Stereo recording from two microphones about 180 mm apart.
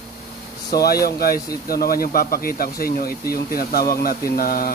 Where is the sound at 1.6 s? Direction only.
55° left (ahead or behind).